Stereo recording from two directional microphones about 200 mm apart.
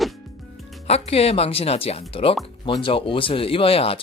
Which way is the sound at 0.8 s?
30° left (ahead or behind).